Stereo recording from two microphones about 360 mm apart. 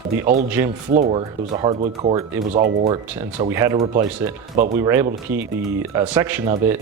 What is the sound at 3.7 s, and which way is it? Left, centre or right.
Speech, centre.